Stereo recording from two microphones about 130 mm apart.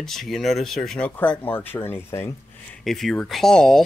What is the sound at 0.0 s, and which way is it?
Speech, centre (ahead or behind).